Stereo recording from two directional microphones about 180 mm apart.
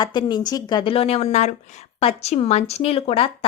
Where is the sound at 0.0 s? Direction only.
25° left (ahead or behind).